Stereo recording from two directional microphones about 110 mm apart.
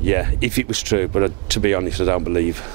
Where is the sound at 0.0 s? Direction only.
20° right (ahead or behind).